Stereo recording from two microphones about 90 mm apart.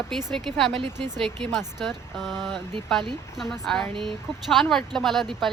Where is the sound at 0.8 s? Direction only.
50° right (ahead or behind).